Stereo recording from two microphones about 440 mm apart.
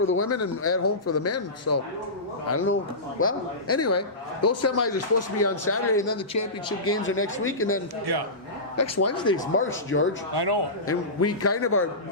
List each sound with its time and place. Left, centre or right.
0.0 s a man's voice: left
8.1 s a man's voice: right
8.7 s speech: left
9.1 s speech: centre
9.9 s speech: left
10.3 s a man's voice: right
10.8 s a man's voice: left